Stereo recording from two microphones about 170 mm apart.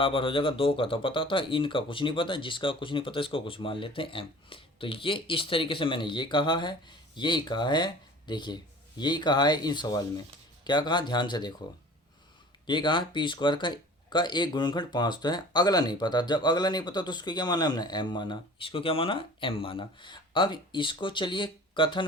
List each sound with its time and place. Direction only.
0.0 s speech: 30° left (ahead or behind)
12.6 s speech: 30° left (ahead or behind)